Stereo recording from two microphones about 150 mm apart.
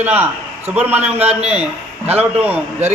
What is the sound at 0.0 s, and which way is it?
A man's voice, 10° right (ahead or behind).